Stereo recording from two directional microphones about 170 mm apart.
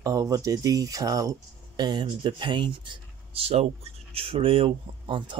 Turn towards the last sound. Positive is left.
turn(degrees=-30)  # may be behind; listen again after turning